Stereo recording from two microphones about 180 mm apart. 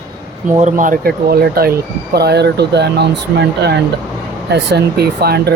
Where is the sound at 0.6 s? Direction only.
45° right (ahead or behind).